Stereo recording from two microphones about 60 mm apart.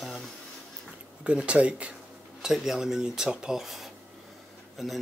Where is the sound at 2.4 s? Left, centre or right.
Centre.